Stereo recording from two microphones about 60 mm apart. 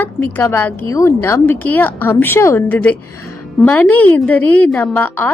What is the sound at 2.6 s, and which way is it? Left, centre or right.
A woman's voice, left.